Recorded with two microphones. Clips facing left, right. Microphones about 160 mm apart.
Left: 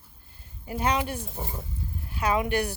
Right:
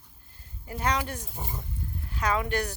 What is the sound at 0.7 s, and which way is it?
Speech, 20° left (ahead or behind).